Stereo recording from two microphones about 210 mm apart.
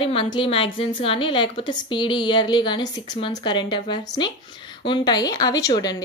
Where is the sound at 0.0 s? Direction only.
25° left (ahead or behind).